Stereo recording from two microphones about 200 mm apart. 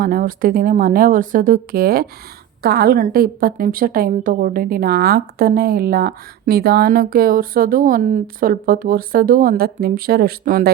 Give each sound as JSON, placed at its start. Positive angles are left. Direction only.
{"t": 0.0, "sound": "a woman's voice", "side_deg": -45}